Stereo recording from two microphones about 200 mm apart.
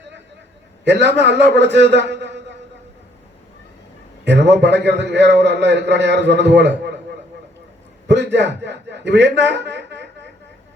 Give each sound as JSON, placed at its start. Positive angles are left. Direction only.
{"t": 0.9, "sound": "a man's voice", "side_deg": -60}
{"t": 4.3, "sound": "a man's voice", "side_deg": -60}
{"t": 8.0, "sound": "a man's voice", "side_deg": -60}